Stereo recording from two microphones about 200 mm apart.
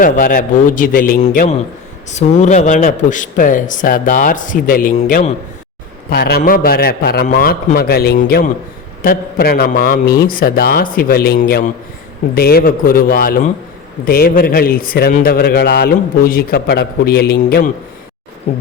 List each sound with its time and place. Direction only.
0.0 s a man's voice: 45° left (ahead or behind)
6.1 s a man's voice: 50° left (ahead or behind)